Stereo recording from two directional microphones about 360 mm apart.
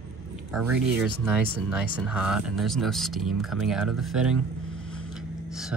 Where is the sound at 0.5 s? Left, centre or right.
Centre.